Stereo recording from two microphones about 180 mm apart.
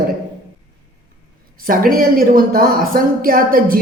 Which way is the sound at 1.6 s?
50° right (ahead or behind).